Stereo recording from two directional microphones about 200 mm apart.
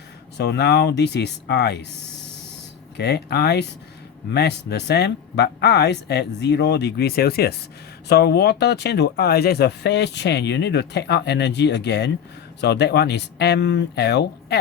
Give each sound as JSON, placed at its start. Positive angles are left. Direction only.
{"t": 0.3, "sound": "speech", "side_deg": 55}
{"t": 3.0, "sound": "speech", "side_deg": 55}